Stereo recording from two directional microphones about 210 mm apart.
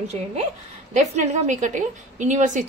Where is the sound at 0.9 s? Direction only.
35° right (ahead or behind).